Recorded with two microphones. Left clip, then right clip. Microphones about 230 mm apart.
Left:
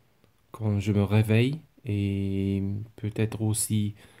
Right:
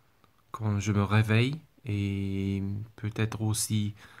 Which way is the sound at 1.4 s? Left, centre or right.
Right.